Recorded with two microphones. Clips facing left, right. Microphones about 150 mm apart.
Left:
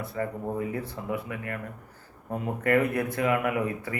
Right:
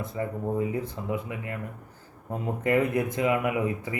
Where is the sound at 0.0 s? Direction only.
20° right (ahead or behind).